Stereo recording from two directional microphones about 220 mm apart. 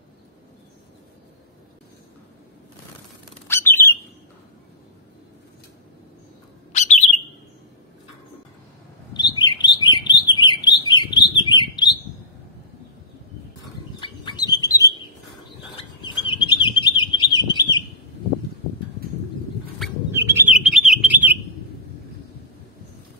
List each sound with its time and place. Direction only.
3.4 s bird: 10° left (ahead or behind)
6.7 s bird: 30° left (ahead or behind)
9.1 s chirp: 20° left (ahead or behind)
13.9 s bird: 20° left (ahead or behind)
16.0 s bird: 20° left (ahead or behind)
20.1 s bird: 10° right (ahead or behind)